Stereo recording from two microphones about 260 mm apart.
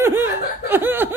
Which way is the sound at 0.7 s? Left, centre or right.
Centre.